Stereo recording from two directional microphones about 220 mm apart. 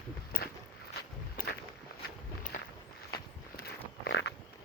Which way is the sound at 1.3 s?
45° left (ahead or behind).